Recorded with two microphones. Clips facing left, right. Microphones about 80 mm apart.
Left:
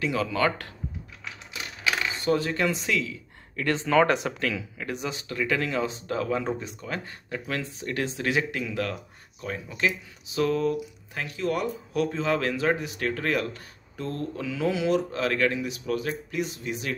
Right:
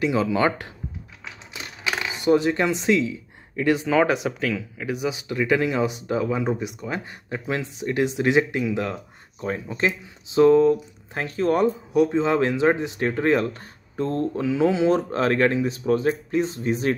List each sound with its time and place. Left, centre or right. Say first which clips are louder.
0.0 s speech: right 4 dB; right
9.4 s speech: right 4 dB; right
11.9 s speech: right 4 dB; right